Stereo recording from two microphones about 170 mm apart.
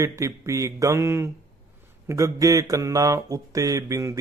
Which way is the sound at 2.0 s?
20° right (ahead or behind).